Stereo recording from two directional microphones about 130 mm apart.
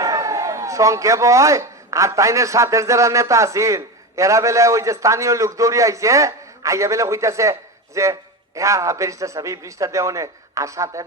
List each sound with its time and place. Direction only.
0.0 s a man's voice: 25° right (ahead or behind)